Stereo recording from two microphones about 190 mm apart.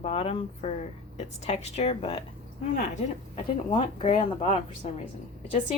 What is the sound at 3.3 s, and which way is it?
Speech, 25° left (ahead or behind).